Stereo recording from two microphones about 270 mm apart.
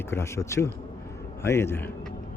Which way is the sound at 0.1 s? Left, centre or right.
Centre.